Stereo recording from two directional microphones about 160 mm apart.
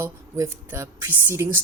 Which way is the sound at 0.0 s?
15° right (ahead or behind).